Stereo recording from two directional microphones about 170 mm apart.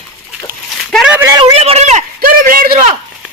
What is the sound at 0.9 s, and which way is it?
Speech, centre (ahead or behind).